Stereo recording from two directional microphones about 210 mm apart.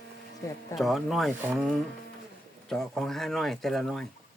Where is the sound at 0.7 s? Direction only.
Centre (ahead or behind).